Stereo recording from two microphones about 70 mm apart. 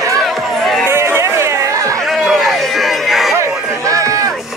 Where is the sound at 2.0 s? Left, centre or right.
Centre.